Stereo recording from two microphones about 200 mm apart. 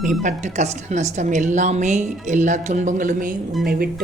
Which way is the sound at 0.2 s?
35° right (ahead or behind).